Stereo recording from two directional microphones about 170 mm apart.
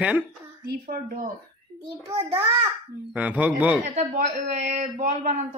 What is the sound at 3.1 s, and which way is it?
Speech, 10° right (ahead or behind).